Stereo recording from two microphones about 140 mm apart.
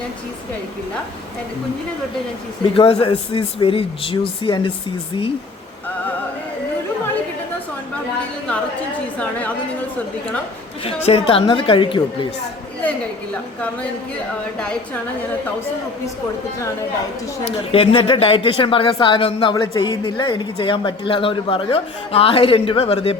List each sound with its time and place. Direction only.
2.7 s a woman's voice: 40° left (ahead or behind)
10.8 s a woman's voice: 45° left (ahead or behind)
17.4 s a woman's voice: 40° left (ahead or behind)
19.6 s a woman's voice: 25° left (ahead or behind); by 23.1 s 45° left (ahead or behind)